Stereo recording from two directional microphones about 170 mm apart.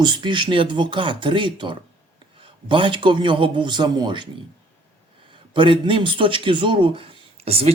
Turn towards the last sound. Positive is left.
turn(degrees=-35)  # may be behind; listen again after turning